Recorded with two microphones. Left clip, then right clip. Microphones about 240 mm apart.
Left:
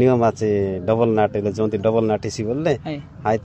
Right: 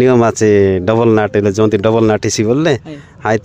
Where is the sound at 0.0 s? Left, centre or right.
Right.